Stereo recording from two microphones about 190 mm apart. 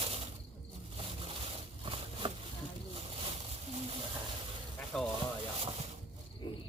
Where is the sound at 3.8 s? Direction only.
30° right (ahead or behind).